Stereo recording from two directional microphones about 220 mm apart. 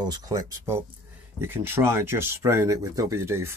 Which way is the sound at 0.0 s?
20° right (ahead or behind).